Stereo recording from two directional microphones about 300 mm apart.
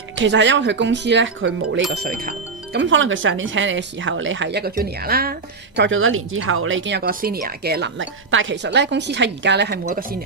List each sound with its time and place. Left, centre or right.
0.2 s speech: right
1.9 s speech: right
2.7 s speech: right